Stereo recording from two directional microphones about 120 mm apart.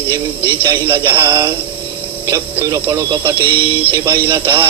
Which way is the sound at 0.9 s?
15° right (ahead or behind).